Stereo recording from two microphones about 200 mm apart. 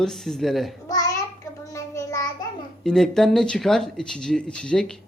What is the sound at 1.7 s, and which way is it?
Child singing, 15° left (ahead or behind).